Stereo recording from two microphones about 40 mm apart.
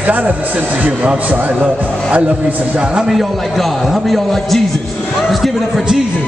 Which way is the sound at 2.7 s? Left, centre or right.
Right.